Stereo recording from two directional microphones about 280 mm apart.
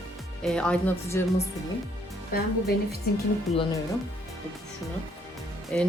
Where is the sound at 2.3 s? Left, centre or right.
Left.